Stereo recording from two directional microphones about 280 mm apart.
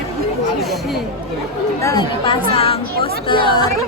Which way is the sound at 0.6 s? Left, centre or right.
Centre.